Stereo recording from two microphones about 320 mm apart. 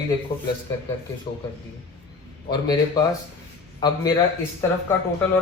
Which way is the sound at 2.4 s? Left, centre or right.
Centre.